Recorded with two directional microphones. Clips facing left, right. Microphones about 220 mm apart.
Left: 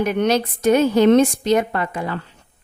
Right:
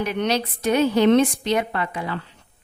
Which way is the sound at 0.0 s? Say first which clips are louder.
Left 5 dB; 50° left (ahead or behind).